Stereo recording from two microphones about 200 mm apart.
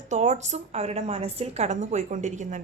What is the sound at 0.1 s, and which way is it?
A woman's voice, 35° right (ahead or behind).